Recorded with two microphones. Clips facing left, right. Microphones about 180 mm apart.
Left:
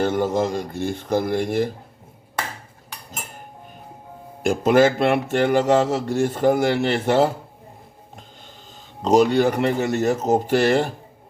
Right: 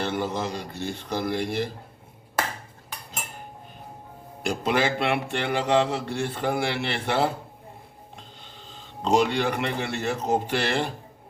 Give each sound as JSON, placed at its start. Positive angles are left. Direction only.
{"t": 0.0, "sound": "speech", "side_deg": 45}
{"t": 4.4, "sound": "speech", "side_deg": 45}
{"t": 8.6, "sound": "speech", "side_deg": 40}